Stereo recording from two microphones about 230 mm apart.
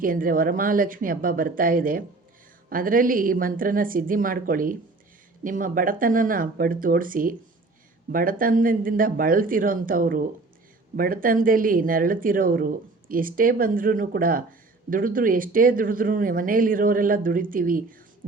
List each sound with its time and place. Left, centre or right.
0.0 s speech: right